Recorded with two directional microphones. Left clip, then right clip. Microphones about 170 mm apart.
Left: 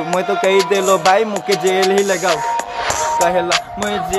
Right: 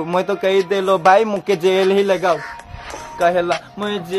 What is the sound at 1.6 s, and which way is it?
Music, 10° right (ahead or behind).